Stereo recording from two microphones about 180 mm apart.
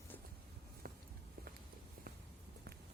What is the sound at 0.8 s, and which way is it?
Walk, 55° right (ahead or behind).